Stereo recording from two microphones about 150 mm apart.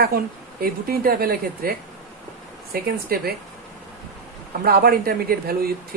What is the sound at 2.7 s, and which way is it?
Speech, 85° right.